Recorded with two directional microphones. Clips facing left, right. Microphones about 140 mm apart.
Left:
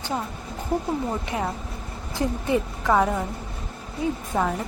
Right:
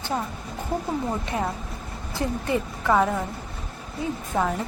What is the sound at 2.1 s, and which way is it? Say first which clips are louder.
A woman's voice: left 2 dB; 20° left (ahead or behind).